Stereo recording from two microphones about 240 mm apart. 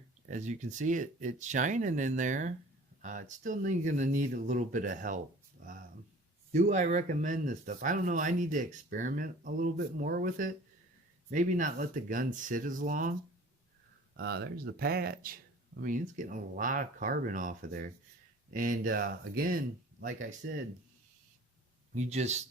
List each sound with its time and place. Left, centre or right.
0.3 s speech: right
5.6 s a sound: right
6.5 s speech: right
14.2 s speech: right
21.9 s speech: right